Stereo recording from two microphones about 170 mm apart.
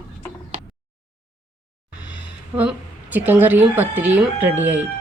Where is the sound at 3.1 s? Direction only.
10° right (ahead or behind).